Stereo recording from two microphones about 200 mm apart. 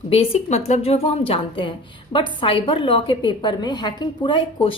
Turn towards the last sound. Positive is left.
turn(degrees=25)  # may be behind; listen again after turning